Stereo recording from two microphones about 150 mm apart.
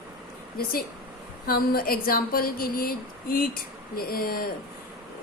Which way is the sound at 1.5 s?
80° left.